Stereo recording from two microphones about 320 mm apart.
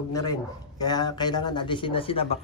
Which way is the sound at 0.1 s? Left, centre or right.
Centre.